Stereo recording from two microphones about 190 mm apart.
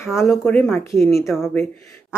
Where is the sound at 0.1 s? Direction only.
Centre (ahead or behind).